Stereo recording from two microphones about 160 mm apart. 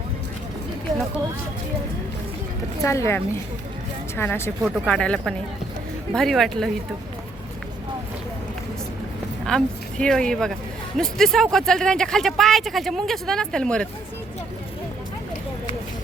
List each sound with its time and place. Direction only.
2.8 s speech: 20° left (ahead or behind)
4.2 s speech: 15° left (ahead or behind)
9.4 s speech: centre (ahead or behind)